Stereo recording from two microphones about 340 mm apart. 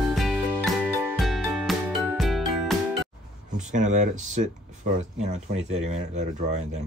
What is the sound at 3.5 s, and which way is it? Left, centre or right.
Speech, right.